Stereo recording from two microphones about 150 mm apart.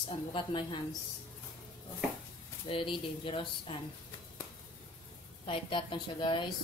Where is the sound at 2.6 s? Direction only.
35° left (ahead or behind).